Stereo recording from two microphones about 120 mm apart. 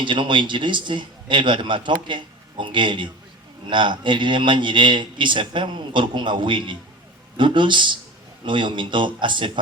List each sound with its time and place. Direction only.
0.0 s a man's voice: 45° right (ahead or behind)